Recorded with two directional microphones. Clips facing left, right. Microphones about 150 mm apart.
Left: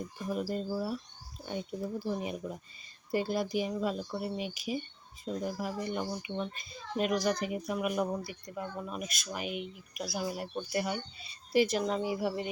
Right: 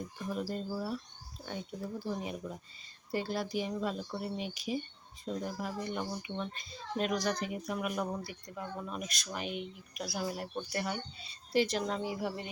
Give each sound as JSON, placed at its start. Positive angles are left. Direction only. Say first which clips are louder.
{"t": 0.3, "sound": "a child's voice", "louder": "left 3 dB", "side_deg": 10}